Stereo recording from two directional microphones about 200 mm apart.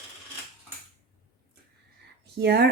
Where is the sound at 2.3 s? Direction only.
55° right (ahead or behind).